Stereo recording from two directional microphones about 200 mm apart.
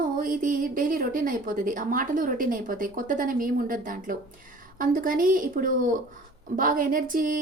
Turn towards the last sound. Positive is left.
turn(degrees=-40)  # may be behind; listen again after turning